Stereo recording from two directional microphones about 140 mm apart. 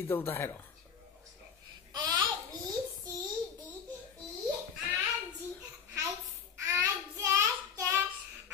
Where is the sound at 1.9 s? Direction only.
30° right (ahead or behind).